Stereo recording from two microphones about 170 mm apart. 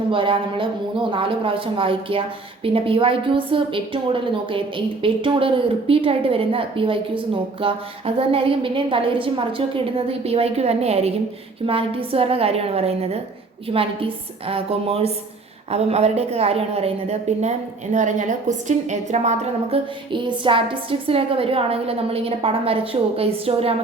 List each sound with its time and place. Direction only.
0.1 s a woman's voice: 30° right (ahead or behind)